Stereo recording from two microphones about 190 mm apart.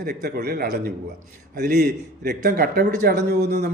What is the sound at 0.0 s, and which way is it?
A man's voice, 55° right (ahead or behind).